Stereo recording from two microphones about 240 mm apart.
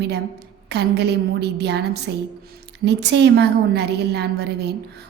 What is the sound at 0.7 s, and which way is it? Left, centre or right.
A woman's voice, right.